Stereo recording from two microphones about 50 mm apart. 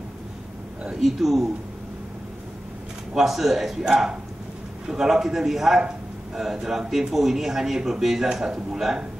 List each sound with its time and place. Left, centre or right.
1.0 s speech: centre
3.2 s speech: centre